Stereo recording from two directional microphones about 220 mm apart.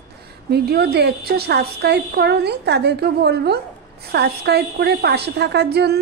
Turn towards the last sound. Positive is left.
turn(degrees=-50)  # may be behind; listen again after turning